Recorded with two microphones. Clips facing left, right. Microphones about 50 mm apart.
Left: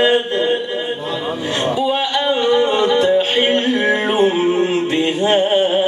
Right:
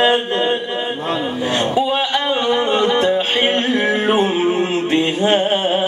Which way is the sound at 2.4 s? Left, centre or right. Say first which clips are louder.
Left 2 dB; right.